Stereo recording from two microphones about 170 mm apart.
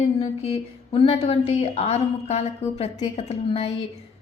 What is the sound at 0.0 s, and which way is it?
A woman's voice, 35° left (ahead or behind).